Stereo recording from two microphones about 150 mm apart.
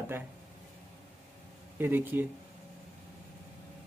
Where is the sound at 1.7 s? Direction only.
15° right (ahead or behind).